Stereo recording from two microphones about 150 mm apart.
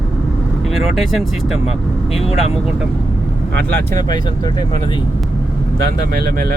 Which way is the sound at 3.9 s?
30° left (ahead or behind).